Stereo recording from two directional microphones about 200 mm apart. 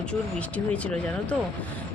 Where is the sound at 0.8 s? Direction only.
5° left (ahead or behind).